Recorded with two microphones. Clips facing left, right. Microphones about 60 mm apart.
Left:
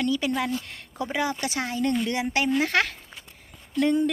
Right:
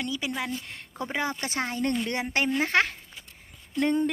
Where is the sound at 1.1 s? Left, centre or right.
Right.